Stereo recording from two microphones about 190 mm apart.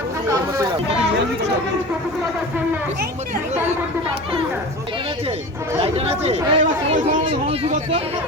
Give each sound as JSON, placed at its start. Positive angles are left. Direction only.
{"t": 5.8, "sound": "speech", "side_deg": -35}